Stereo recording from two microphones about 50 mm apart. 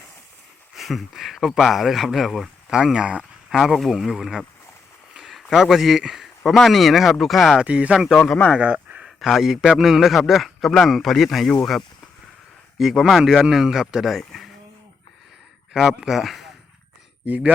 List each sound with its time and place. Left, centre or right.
0.8 s a man's voice: centre
2.7 s speech: centre
3.5 s a man's voice: centre
5.1 s a sound: centre
6.1 s a man's voice: centre
7.6 s speech: right
8.5 s a sound: right
9.0 s a man's voice: centre
16.0 s speech: centre
17.2 s speech: right